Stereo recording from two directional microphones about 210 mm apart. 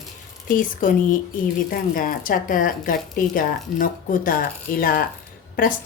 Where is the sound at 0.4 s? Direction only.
40° left (ahead or behind).